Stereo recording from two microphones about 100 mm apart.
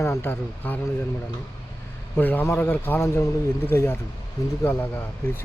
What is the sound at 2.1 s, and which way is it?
A man's voice, 20° left (ahead or behind).